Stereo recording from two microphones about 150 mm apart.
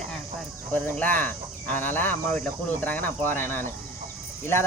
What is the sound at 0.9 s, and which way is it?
Speech, 10° left (ahead or behind).